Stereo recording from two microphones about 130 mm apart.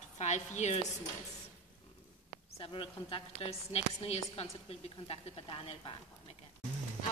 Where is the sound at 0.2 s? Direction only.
60° left (ahead or behind).